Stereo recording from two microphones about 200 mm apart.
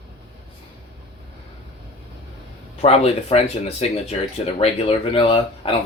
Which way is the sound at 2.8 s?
30° left (ahead or behind).